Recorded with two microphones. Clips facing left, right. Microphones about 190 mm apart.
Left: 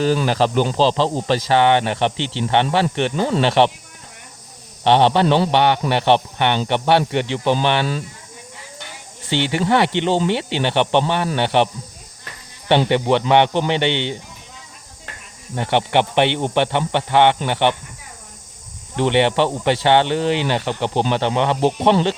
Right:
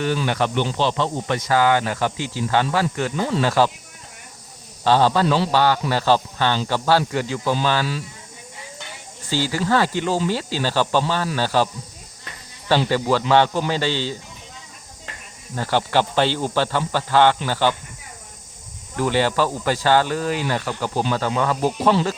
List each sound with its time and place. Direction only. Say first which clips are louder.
0.3 s a man's voice: left 4 dB; 30° left (ahead or behind)
4.8 s a man's voice: left 3 dB; 25° left (ahead or behind)
9.3 s a man's voice: left 3 dB; 25° left (ahead or behind)
15.5 s a man's voice: left 2 dB; 20° left (ahead or behind)
18.9 s a man's voice: left 3 dB; 25° left (ahead or behind)